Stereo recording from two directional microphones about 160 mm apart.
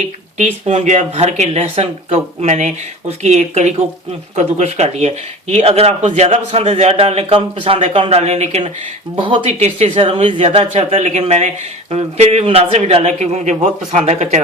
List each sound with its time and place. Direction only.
0.9 s speech: 45° right (ahead or behind)